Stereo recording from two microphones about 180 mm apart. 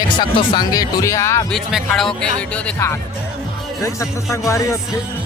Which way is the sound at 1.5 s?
Centre (ahead or behind).